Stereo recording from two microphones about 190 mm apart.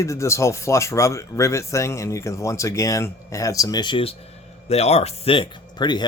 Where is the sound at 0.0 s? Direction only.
15° left (ahead or behind).